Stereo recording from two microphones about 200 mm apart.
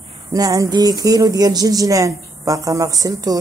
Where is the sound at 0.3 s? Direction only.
15° right (ahead or behind).